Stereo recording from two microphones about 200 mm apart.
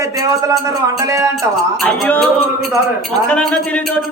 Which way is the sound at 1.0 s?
15° right (ahead or behind).